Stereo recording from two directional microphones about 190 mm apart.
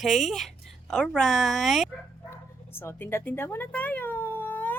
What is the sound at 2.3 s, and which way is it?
Dog, 10° left (ahead or behind).